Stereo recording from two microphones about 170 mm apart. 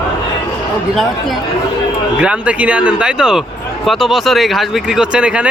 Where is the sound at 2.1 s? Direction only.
5° right (ahead or behind).